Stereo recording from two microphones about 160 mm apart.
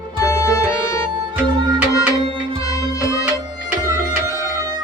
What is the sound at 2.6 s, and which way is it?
Music, 20° left (ahead or behind).